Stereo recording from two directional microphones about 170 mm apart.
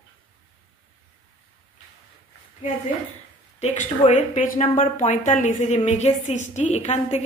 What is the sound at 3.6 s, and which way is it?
A woman's voice, 45° left (ahead or behind).